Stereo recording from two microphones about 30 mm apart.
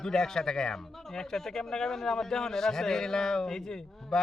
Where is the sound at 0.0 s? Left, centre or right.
Centre.